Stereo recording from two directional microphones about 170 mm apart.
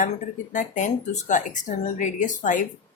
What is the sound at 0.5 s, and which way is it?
Speech, 45° left (ahead or behind).